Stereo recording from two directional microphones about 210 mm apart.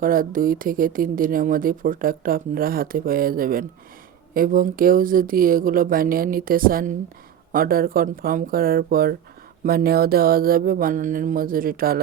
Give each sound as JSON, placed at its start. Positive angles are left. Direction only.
{"t": 0.0, "sound": "speech", "side_deg": -40}